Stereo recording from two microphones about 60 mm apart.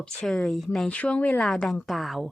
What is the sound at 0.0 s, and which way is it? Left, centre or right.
Speech, centre.